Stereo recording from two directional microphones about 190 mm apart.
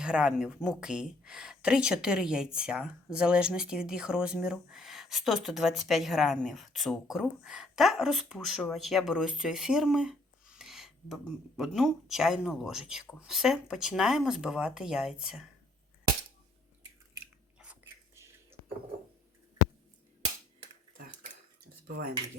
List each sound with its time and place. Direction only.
0.0 s speech: 5° right (ahead or behind)
17.6 s whispering: 10° right (ahead or behind)
21.8 s speech: 55° right (ahead or behind)